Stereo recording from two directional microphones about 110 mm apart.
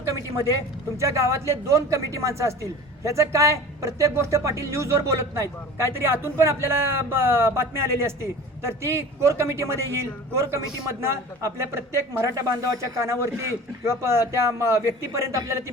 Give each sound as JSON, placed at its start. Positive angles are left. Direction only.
{"t": 0.9, "sound": "speech", "side_deg": -25}